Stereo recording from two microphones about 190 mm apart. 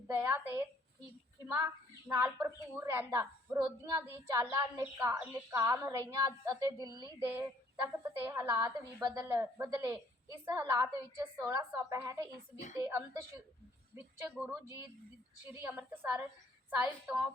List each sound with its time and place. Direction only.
0.1 s a woman's voice: 15° right (ahead or behind)